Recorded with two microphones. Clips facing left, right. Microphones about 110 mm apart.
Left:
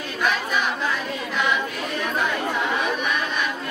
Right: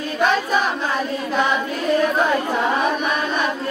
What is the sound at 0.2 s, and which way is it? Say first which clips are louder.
Choir: right 5 dB; 35° right (ahead or behind).